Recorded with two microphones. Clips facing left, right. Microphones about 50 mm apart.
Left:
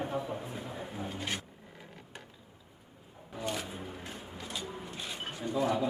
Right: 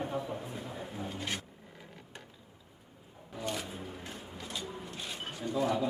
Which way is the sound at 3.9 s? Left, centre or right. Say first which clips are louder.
Left 1 dB; centre.